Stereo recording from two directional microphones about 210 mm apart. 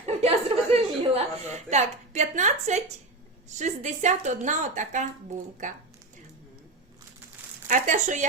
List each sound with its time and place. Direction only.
0.0 s chuckle: 30° right (ahead or behind)
3.5 s a woman's voice: 35° right (ahead or behind)
7.7 s a woman's voice: 35° right (ahead or behind)